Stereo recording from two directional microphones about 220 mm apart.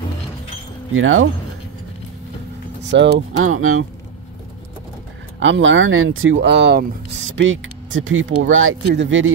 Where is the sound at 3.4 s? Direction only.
70° right (ahead or behind).